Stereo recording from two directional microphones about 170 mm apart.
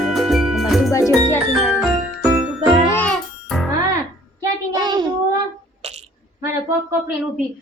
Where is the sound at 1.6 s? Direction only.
Centre (ahead or behind).